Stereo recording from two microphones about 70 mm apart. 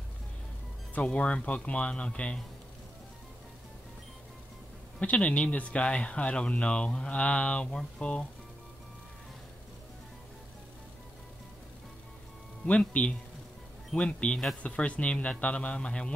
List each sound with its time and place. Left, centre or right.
0.9 s speech: centre
5.0 s speech: centre
12.6 s speech: centre